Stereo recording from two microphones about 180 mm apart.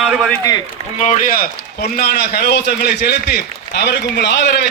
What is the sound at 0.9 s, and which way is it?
A man's voice, 40° left (ahead or behind).